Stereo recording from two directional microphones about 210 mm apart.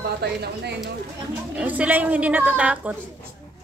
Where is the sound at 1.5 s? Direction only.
5° right (ahead or behind).